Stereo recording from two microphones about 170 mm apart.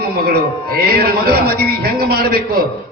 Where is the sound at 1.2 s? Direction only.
65° right (ahead or behind).